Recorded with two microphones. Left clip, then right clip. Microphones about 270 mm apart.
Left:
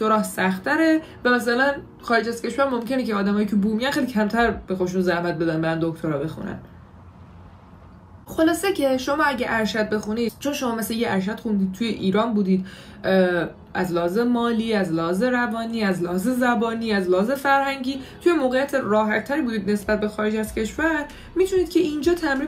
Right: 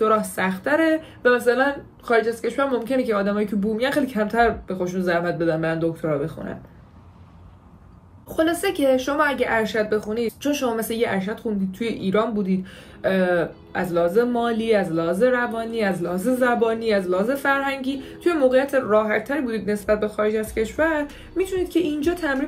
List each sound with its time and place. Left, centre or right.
0.0 s speech: centre
8.4 s speech: centre